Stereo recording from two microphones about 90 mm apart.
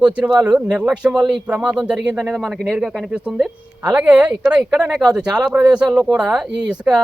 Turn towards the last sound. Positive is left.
turn(degrees=-10)  # may be behind; listen again after turning